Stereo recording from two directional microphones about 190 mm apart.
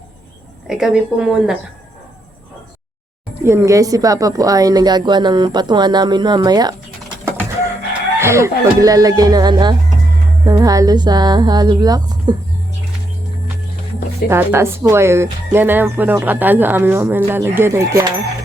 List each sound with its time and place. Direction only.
0.7 s a woman's voice: 5° right (ahead or behind)
3.4 s a woman's voice: 15° right (ahead or behind)
7.3 s chicken: 15° right (ahead or behind)
8.2 s a woman's voice: 15° right (ahead or behind)
14.3 s speech: 10° right (ahead or behind)